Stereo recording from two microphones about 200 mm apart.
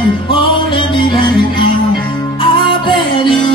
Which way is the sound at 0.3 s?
25° left (ahead or behind).